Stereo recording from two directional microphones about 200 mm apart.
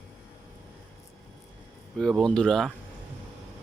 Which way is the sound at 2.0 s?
5° left (ahead or behind).